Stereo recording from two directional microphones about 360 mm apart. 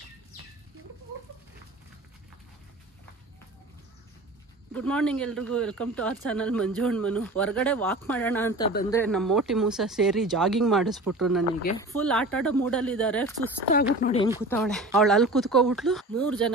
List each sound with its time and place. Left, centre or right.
4.7 s speech: centre
13.7 s a woman's voice: left
14.5 s speech: centre